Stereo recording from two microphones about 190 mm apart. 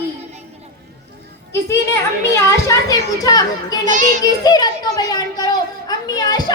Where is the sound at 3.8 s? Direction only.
40° right (ahead or behind).